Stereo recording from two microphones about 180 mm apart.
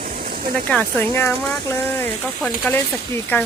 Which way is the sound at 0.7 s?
5° left (ahead or behind).